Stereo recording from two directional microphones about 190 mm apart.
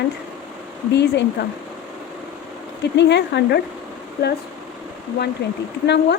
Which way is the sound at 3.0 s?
65° left (ahead or behind).